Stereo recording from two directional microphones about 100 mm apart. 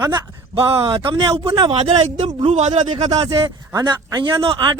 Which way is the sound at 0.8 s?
60° right (ahead or behind).